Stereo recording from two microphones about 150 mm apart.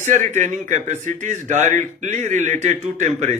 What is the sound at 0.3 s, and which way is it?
A man's voice, 50° right (ahead or behind).